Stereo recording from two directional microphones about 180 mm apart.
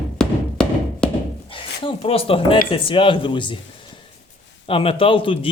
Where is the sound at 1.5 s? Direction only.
30° left (ahead or behind).